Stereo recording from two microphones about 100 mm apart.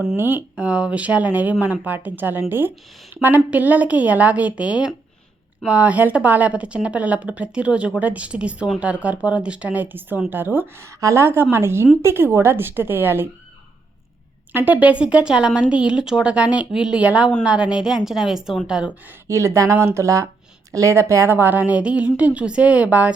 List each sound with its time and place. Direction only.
0.2 s a woman's voice: 20° right (ahead or behind)
14.5 s a woman's voice: 15° right (ahead or behind)
19.3 s a woman's voice: 30° right (ahead or behind); by 23.1 s 15° right (ahead or behind)